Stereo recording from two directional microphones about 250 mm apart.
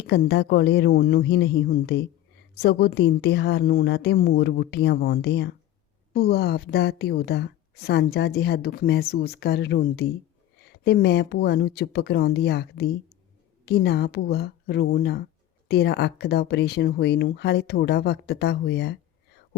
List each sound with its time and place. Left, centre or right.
0.0 s a woman's voice: left